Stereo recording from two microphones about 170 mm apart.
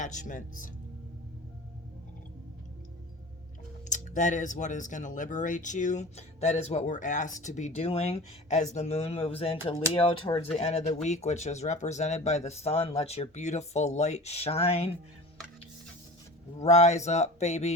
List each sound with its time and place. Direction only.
0.0 s speech: 45° left (ahead or behind)
3.8 s speech: 45° left (ahead or behind)
16.6 s speech: 40° left (ahead or behind)